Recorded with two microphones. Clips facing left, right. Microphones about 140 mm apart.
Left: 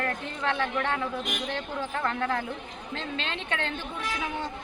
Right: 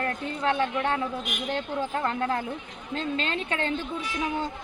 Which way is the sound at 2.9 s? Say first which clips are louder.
Right 5 dB; 45° right (ahead or behind).